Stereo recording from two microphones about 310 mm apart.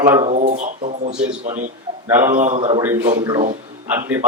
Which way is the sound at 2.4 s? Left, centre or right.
Centre.